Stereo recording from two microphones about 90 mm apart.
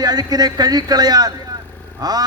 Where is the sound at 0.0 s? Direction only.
50° right (ahead or behind).